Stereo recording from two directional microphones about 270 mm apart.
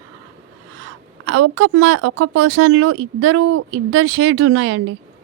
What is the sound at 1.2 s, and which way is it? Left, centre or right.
A woman's voice, right.